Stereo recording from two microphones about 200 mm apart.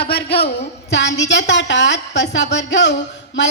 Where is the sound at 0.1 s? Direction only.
55° left (ahead or behind).